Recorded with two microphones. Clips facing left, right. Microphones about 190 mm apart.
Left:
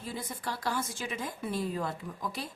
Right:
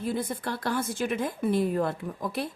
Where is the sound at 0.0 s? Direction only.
60° right (ahead or behind).